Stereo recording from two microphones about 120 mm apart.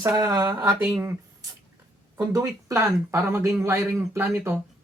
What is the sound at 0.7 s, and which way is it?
Speech, centre (ahead or behind).